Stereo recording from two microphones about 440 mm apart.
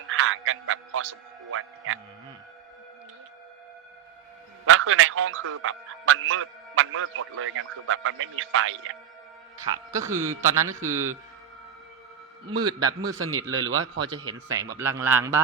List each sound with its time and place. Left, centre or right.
0.1 s a man's voice: right
4.6 s a man's voice: right
9.9 s speech: centre
10.4 s speech: right
10.7 s speech: centre
12.5 s a man's voice: centre
13.1 s a man's voice: right
14.4 s a man's voice: centre